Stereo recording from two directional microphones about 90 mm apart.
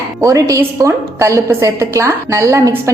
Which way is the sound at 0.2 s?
35° right (ahead or behind).